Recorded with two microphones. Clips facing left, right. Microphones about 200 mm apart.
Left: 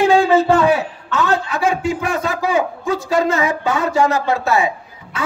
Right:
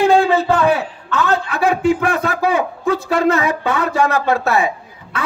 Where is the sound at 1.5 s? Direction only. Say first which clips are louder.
Right 3 dB; 60° right (ahead or behind).